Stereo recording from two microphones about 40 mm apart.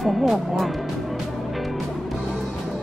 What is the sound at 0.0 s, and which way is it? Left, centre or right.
Speech, centre.